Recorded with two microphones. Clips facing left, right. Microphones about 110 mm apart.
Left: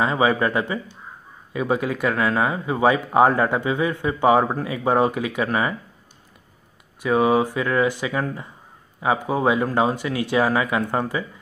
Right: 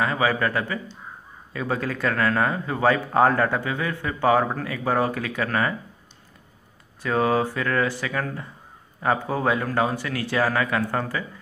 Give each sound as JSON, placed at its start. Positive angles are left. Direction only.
{"t": 0.0, "sound": "a man's voice", "side_deg": 20}
{"t": 7.0, "sound": "speech", "side_deg": 15}